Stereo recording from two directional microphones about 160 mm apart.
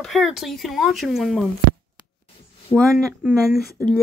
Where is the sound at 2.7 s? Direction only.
20° left (ahead or behind).